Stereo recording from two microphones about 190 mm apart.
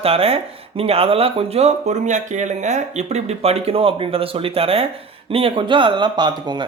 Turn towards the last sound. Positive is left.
turn(degrees=-25)  # may be behind; listen again after turning